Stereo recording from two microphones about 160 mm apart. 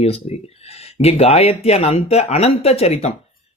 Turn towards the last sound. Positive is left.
turn(degrees=40)  # may be behind; listen again after turning